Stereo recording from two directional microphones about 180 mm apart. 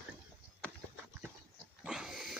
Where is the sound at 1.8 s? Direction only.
5° right (ahead or behind).